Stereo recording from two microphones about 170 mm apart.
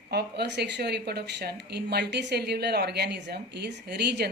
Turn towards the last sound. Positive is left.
turn(degrees=-75)  # may be behind; listen again after turning